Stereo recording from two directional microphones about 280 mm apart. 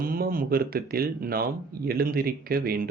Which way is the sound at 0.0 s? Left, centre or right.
Right.